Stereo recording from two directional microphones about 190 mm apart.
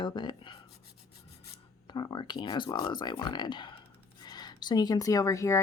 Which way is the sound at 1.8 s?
20° left (ahead or behind).